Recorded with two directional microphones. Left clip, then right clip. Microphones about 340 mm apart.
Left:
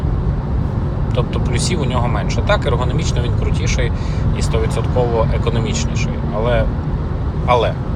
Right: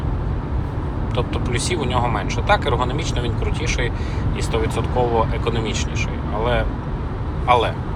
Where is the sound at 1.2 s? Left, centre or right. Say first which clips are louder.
Left 2 dB; centre.